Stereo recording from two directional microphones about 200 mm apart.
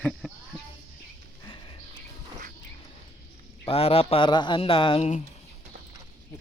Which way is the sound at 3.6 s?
30° left (ahead or behind).